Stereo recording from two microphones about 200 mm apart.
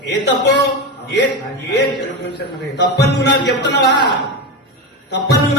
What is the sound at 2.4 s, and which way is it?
A man's voice, 55° left (ahead or behind).